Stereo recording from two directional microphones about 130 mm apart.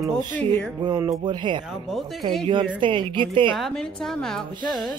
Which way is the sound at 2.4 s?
35° right (ahead or behind).